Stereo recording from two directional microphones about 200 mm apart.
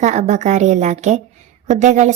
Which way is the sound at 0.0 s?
35° right (ahead or behind).